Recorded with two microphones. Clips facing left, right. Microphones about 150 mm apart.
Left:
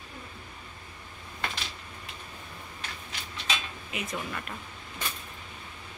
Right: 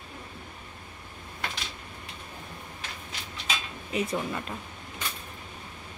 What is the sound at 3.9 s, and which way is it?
Speech, 30° right (ahead or behind).